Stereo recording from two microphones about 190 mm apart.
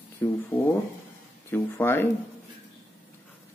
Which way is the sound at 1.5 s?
10° left (ahead or behind).